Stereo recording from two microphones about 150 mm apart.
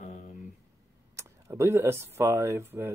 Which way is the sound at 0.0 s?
65° left (ahead or behind).